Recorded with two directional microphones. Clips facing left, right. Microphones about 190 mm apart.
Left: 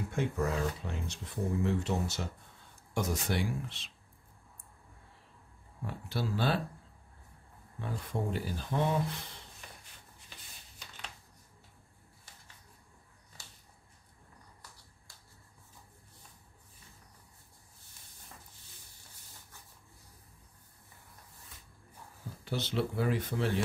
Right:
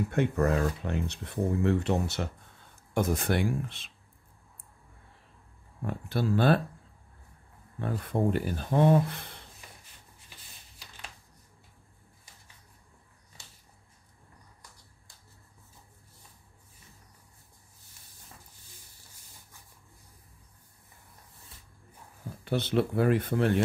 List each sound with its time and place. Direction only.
0.1 s speech: 60° right (ahead or behind)
5.9 s speech: 55° right (ahead or behind)
7.8 s speech: 55° right (ahead or behind)
22.4 s speech: 55° right (ahead or behind)